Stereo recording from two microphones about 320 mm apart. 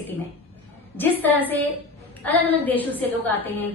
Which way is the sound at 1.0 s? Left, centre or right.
Centre.